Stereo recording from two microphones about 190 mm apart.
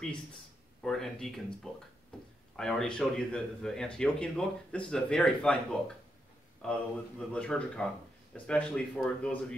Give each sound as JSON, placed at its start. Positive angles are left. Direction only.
{"t": 0.8, "sound": "speech", "side_deg": 0}